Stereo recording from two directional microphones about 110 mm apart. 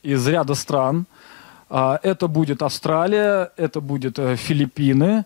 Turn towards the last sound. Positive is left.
turn(degrees=20)  # may be behind; listen again after turning